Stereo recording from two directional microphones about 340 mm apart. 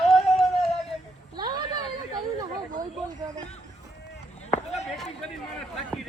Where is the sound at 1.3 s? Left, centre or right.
Centre.